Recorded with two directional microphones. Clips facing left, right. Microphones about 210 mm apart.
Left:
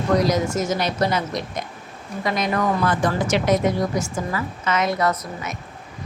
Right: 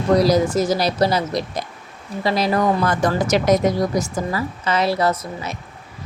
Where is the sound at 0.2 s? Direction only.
35° right (ahead or behind).